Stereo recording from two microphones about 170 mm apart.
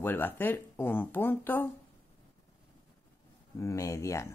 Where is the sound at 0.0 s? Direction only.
10° left (ahead or behind).